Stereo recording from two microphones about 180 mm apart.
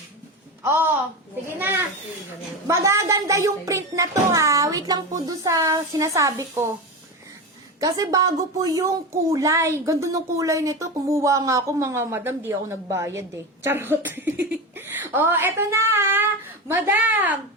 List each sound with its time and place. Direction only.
0.6 s a woman's voice: 15° right (ahead or behind)
7.8 s a woman's voice: 20° right (ahead or behind)